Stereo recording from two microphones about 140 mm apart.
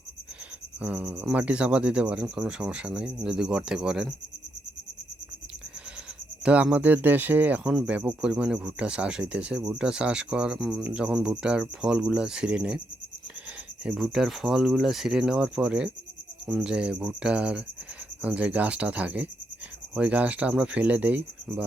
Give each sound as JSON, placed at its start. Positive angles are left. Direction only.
{"t": 0.8, "sound": "speech", "side_deg": -10}
{"t": 6.4, "sound": "speech", "side_deg": -10}
{"t": 13.8, "sound": "speech", "side_deg": -5}